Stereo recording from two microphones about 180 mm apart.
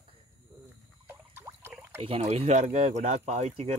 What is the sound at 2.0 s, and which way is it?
Speech, 30° right (ahead or behind).